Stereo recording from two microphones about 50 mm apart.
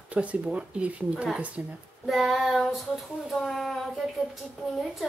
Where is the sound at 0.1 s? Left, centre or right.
Right.